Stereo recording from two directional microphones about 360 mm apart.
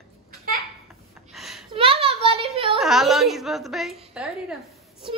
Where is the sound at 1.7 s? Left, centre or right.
Centre.